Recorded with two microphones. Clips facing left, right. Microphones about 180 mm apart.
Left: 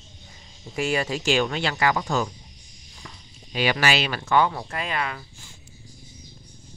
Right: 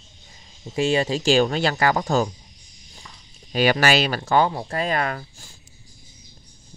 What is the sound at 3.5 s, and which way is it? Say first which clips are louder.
Speech: right 4 dB; 45° right (ahead or behind).